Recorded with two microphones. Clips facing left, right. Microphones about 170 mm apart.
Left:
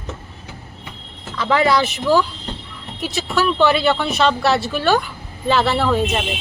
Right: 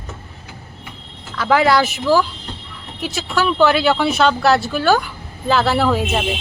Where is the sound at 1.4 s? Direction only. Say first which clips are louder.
Right 2 dB; centre (ahead or behind).